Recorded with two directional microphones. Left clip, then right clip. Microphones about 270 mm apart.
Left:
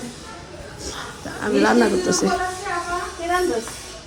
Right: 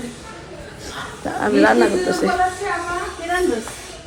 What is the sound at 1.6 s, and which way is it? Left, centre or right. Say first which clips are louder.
Speech: right 2 dB; centre.